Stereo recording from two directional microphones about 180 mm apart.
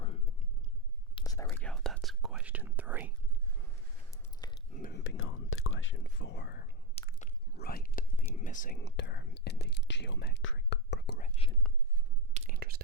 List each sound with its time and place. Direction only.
0.0 s whispering: 35° left (ahead or behind)
1.1 s whispering: 20° left (ahead or behind)
1.6 s whispering: 5° left (ahead or behind)
4.1 s biting: 20° left (ahead or behind)
4.9 s whispering: 80° left; by 6.7 s 65° left (ahead or behind)
6.9 s biting: 40° left (ahead or behind)
7.5 s whispering: 60° left (ahead or behind)
8.8 s whispering: 70° left (ahead or behind)
11.6 s whispering: centre (ahead or behind)
12.3 s whispering: 40° right (ahead or behind)
12.5 s whispering: 55° right (ahead or behind)